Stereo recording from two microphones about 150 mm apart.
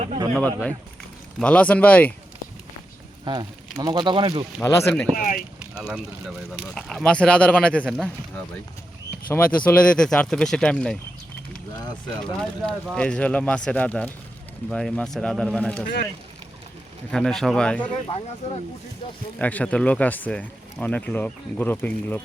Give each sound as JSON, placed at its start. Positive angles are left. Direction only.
{"t": 0.3, "sound": "speech", "side_deg": 5}
{"t": 3.2, "sound": "speech", "side_deg": -25}
{"t": 4.6, "sound": "speech", "side_deg": 15}
{"t": 5.1, "sound": "speech", "side_deg": 65}
{"t": 5.7, "sound": "speech", "side_deg": -5}
{"t": 9.3, "sound": "speech", "side_deg": 10}
{"t": 12.2, "sound": "speech", "side_deg": 5}
{"t": 17.1, "sound": "speech", "side_deg": 5}
{"t": 19.4, "sound": "speech", "side_deg": 10}